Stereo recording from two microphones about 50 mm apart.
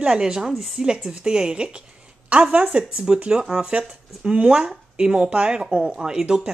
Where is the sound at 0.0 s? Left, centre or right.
Centre.